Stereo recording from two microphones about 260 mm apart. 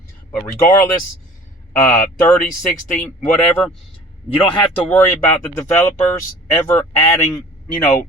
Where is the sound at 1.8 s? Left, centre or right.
Centre.